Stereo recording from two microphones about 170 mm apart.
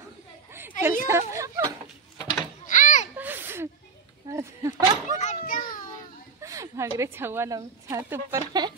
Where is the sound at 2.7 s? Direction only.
50° left (ahead or behind).